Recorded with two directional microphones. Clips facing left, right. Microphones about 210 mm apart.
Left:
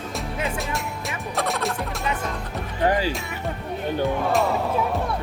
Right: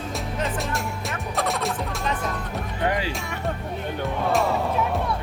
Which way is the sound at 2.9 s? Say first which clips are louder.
Left 4 dB; 40° left (ahead or behind).